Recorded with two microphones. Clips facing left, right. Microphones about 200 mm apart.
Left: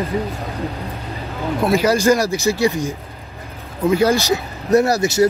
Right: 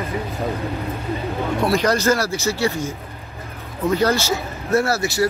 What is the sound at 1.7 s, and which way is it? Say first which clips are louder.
Speech: left 5 dB; 10° left (ahead or behind).